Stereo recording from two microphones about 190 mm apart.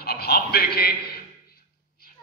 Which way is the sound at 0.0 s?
55° left (ahead or behind).